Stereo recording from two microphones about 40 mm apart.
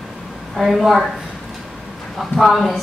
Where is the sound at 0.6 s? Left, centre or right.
Centre.